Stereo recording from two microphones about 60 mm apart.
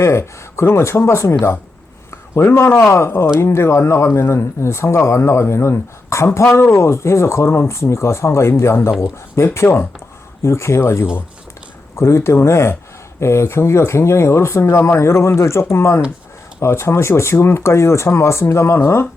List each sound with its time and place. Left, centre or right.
0.0 s speech: left
2.0 s a sound: left
3.4 s speech: left
18.8 s speech: left